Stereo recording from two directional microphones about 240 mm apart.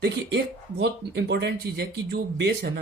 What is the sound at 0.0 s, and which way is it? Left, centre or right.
Speech, right.